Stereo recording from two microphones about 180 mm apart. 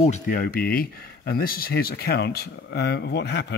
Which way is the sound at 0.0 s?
45° left (ahead or behind).